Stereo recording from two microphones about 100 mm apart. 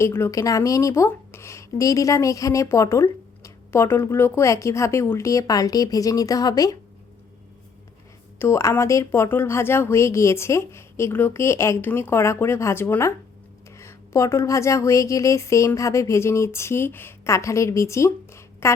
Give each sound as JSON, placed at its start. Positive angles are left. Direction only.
{"t": 0.0, "sound": "a woman's voice", "side_deg": 25}
{"t": 8.4, "sound": "speech", "side_deg": 30}